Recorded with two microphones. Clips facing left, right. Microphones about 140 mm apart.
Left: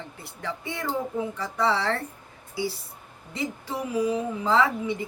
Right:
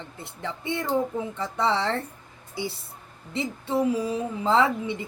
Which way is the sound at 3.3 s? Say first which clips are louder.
Right 4 dB; 25° right (ahead or behind).